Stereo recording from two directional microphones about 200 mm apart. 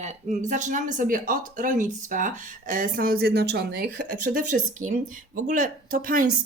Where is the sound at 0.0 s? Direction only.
35° right (ahead or behind).